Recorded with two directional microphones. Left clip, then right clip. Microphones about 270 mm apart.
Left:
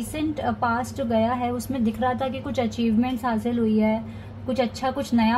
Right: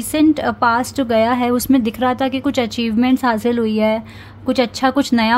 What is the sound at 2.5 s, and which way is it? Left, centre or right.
A woman's voice, right.